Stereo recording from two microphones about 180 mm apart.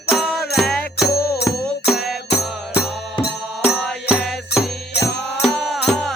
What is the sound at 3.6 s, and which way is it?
Music, centre (ahead or behind).